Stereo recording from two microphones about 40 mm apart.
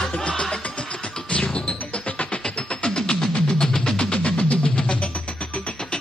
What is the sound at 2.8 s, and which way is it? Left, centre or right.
Music, centre.